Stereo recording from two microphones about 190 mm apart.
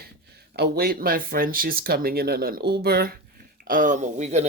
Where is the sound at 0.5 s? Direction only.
55° right (ahead or behind).